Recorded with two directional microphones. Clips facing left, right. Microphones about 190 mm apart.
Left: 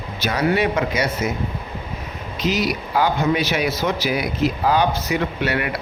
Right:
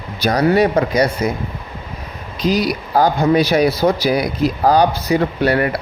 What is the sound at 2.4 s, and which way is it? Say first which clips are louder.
Speech: right 4 dB; 35° right (ahead or behind).